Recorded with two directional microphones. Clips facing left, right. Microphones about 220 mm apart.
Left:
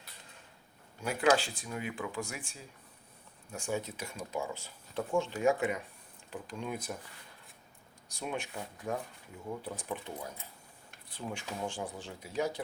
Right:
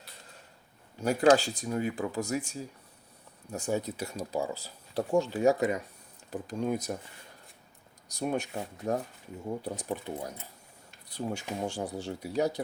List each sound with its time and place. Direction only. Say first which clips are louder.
1.0 s speech: right 6 dB; 40° right (ahead or behind)
8.0 s speech: right 7 dB; 40° right (ahead or behind)
8.8 s speech: right 6 dB; 25° right (ahead or behind)
9.5 s speech: right 4 dB; 40° right (ahead or behind)